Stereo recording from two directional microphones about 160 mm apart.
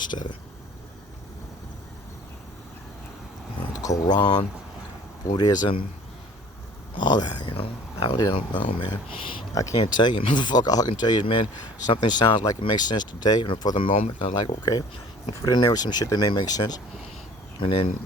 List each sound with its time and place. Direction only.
3.8 s speech: 20° left (ahead or behind)
7.0 s speech: 25° left (ahead or behind)
9.6 s speech: 20° left (ahead or behind)